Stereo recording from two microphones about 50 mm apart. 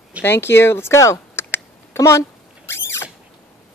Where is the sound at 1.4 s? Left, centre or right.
Left.